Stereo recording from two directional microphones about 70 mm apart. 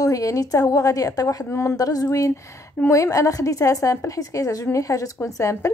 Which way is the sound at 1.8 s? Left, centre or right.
Left.